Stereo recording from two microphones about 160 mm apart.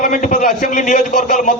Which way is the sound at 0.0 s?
55° left (ahead or behind).